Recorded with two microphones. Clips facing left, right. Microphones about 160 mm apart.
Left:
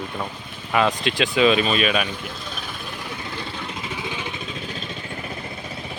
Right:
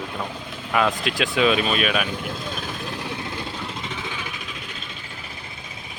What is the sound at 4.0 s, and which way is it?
Vehicle, 20° left (ahead or behind).